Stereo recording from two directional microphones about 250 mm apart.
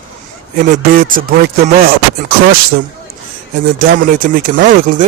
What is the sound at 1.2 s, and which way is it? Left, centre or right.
Speech, right.